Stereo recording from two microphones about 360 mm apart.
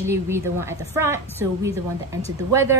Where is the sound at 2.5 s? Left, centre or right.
Centre.